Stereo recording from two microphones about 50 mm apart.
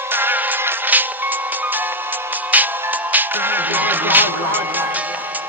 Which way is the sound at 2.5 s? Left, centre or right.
Right.